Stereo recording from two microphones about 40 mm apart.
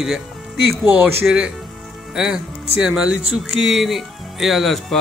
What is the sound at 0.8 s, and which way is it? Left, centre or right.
Speech, right.